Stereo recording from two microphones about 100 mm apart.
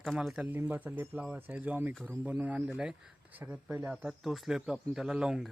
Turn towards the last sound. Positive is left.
turn(degrees=-5)  # may be behind; listen again after turning